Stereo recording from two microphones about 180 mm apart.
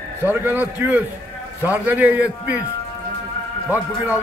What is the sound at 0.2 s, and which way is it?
A man's voice, 10° right (ahead or behind).